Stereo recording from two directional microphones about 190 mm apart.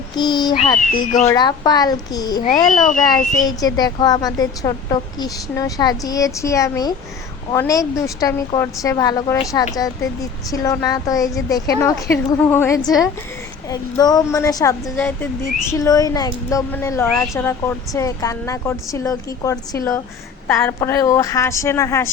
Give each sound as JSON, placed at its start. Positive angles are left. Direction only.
{"t": 0.2, "sound": "a woman's voice", "side_deg": 20}
{"t": 0.9, "sound": "speech", "side_deg": 40}
{"t": 1.3, "sound": "a woman's voice", "side_deg": 20}
{"t": 2.8, "sound": "speech", "side_deg": 45}
{"t": 3.8, "sound": "a woman's voice", "side_deg": 20}